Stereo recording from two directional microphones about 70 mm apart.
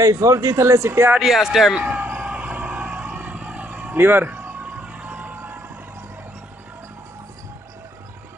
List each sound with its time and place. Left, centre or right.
0.0 s speech: right
1.2 s speech: centre
1.8 s vehicle: right
3.9 s speech: right
4.3 s a sound: right